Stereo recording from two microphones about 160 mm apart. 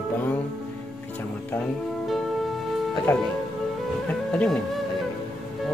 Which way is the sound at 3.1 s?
15° left (ahead or behind).